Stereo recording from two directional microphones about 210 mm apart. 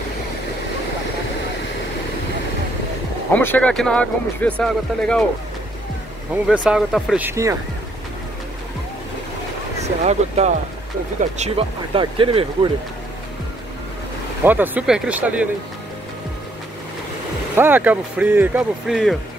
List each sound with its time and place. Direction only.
3.3 s speech: 5° left (ahead or behind)
6.3 s speech: 5° right (ahead or behind)
10.0 s speech: 30° right (ahead or behind)
14.4 s speech: 10° right (ahead or behind)
17.6 s speech: 10° right (ahead or behind)